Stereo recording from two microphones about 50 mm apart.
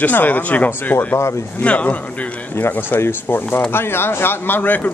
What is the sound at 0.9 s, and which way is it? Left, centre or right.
Speech, left.